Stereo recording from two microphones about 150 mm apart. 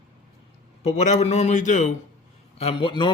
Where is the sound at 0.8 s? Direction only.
45° left (ahead or behind).